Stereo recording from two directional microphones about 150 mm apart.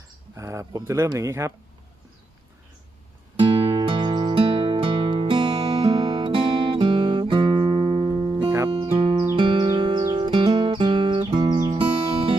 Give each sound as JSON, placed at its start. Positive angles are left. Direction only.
{"t": 0.3, "sound": "speech", "side_deg": -20}
{"t": 3.4, "sound": "music", "side_deg": -35}
{"t": 8.4, "sound": "music", "side_deg": -15}
{"t": 8.7, "sound": "music", "side_deg": -35}